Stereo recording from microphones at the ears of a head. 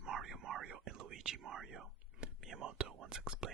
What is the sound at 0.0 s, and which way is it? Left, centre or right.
Whispering, right.